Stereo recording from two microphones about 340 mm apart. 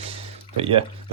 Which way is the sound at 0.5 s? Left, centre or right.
Centre.